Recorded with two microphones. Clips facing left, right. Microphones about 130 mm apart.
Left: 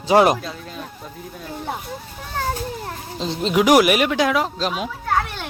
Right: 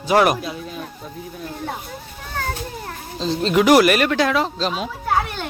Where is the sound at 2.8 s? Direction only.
20° left (ahead or behind).